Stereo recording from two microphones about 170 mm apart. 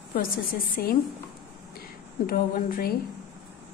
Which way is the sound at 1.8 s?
55° left (ahead or behind).